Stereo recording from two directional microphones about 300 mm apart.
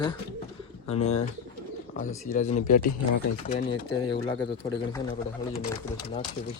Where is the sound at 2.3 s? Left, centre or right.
Left.